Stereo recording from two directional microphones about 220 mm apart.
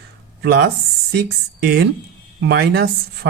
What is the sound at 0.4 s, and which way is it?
Speech, 45° right (ahead or behind).